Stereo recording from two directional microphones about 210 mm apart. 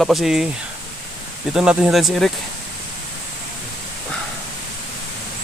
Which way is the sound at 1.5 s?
5° right (ahead or behind).